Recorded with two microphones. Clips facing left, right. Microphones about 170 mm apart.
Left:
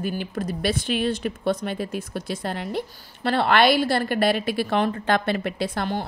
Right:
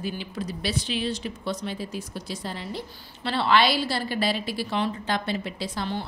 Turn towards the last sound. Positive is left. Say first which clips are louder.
# left 4 dB
turn(degrees=50)  # may be behind; listen again after turning